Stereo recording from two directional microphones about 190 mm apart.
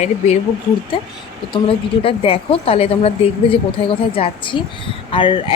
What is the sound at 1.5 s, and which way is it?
Speech, 30° left (ahead or behind).